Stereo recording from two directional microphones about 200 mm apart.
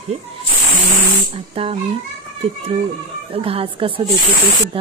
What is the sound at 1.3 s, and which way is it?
Speech, 30° right (ahead or behind).